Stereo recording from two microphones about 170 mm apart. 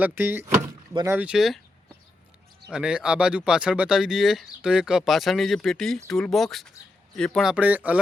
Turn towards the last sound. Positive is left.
turn(degrees=-10)  # may be behind; listen again after turning